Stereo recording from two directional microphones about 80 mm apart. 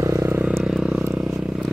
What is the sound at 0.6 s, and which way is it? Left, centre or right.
Vehicle, centre.